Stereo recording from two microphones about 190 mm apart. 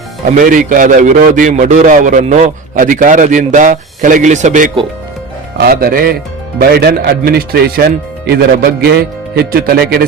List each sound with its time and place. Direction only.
0.3 s a man's voice: 45° right (ahead or behind)
5.5 s a man's voice: 55° right (ahead or behind)
8.9 s a man's voice: 55° right (ahead or behind)